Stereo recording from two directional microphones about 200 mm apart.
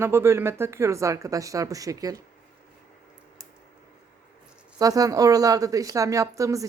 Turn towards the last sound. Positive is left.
turn(degrees=-15)  # may be behind; listen again after turning